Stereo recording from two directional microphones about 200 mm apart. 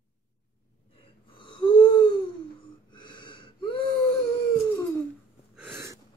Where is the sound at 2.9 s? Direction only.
25° left (ahead or behind).